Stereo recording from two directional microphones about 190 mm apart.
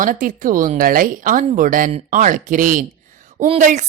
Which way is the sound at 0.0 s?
45° right (ahead or behind).